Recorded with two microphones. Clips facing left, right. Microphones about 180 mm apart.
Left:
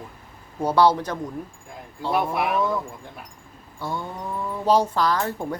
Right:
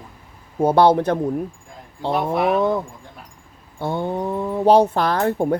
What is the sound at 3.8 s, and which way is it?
Speech, 60° right (ahead or behind).